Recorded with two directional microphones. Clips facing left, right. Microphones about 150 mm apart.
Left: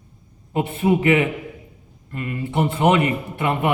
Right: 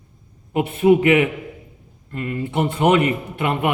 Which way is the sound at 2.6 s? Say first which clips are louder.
Right 1 dB; 25° left (ahead or behind).